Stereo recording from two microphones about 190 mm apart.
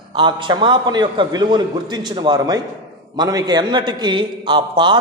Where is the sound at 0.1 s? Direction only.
25° right (ahead or behind).